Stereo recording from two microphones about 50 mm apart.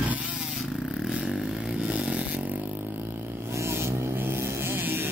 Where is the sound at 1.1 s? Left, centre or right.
Centre.